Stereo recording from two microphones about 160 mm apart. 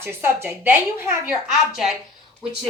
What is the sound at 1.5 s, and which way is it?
Speech, centre (ahead or behind).